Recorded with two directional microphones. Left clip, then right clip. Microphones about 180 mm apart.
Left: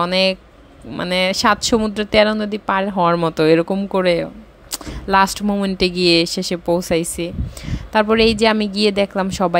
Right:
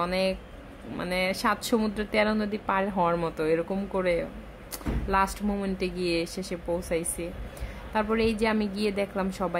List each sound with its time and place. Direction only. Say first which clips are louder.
0.0 s speech: left 10 dB; 40° left (ahead or behind)